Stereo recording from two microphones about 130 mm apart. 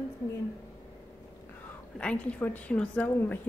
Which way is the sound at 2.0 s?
10° left (ahead or behind).